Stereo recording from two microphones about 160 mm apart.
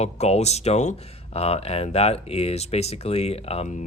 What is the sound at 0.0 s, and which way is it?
Speech, 40° left (ahead or behind).